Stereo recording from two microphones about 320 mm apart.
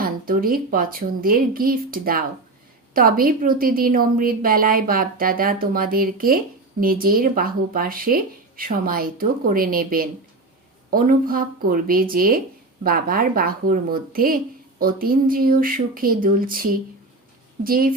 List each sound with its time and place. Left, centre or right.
0.0 s a woman's voice: right